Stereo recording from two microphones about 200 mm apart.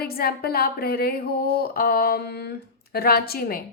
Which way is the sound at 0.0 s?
50° left (ahead or behind).